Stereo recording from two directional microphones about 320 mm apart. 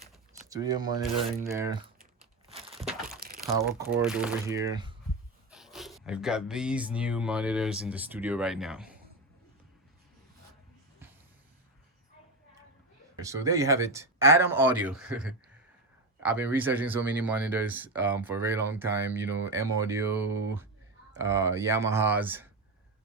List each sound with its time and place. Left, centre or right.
0.0 s a sound: centre
1.0 s speech: centre
2.0 s crumpling: centre
3.2 s crumpling: right
3.4 s speech: centre
5.5 s speech: centre
13.1 s speech: centre